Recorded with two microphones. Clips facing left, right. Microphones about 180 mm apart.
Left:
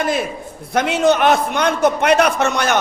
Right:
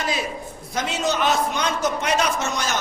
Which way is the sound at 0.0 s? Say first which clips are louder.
Left 6 dB; 55° left (ahead or behind).